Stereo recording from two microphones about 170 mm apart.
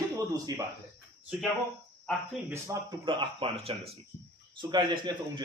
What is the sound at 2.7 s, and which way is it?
Speech, 20° right (ahead or behind).